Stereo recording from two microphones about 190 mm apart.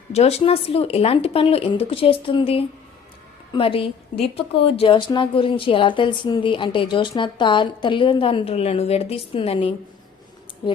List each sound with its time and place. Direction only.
0.1 s a woman's voice: 35° left (ahead or behind)